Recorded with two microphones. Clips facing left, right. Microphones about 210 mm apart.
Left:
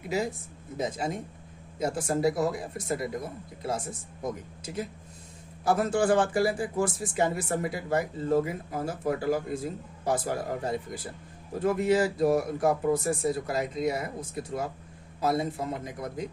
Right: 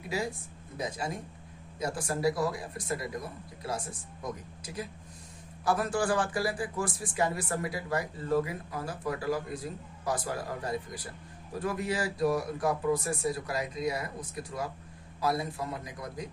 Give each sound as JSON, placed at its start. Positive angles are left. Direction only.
{"t": 0.8, "sound": "speech", "side_deg": 20}